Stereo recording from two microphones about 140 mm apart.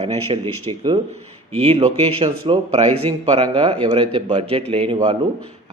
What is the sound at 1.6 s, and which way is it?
A man's voice, 45° right (ahead or behind).